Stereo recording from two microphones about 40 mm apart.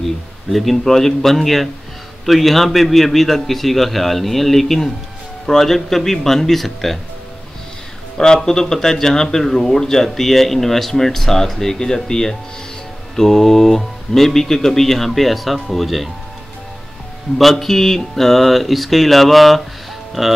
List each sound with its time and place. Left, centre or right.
0.0 s a man's voice: centre
8.5 s a man's voice: centre
17.4 s a man's voice: centre